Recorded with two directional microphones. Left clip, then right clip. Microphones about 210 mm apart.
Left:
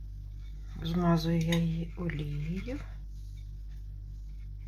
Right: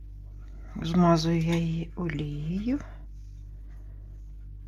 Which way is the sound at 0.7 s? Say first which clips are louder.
Right 7 dB; 45° right (ahead or behind).